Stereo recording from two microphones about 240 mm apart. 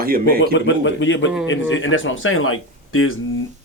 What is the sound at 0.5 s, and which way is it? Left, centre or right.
Speech, left.